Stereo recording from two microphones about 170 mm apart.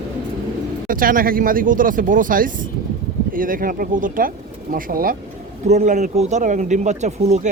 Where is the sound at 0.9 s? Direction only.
55° right (ahead or behind).